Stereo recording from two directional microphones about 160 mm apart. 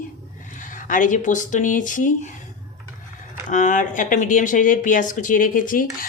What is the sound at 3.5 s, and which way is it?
Speech, 50° left (ahead or behind).